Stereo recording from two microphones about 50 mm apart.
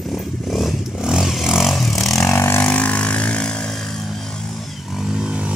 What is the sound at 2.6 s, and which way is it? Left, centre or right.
Vehicle, left.